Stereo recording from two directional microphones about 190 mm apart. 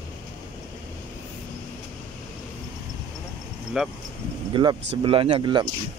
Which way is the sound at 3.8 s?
5° right (ahead or behind).